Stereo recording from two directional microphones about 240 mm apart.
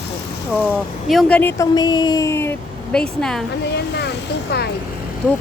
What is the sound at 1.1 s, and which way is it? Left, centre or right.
Speech, centre.